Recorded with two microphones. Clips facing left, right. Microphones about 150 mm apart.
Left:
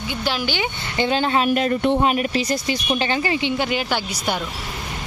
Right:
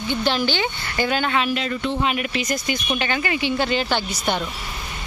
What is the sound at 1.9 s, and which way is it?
Speech, 40° left (ahead or behind).